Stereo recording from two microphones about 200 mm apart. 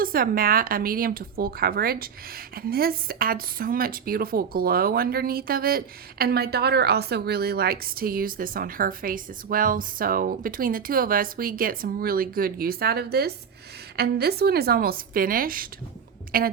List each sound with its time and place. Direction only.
0.0 s speech: 45° right (ahead or behind)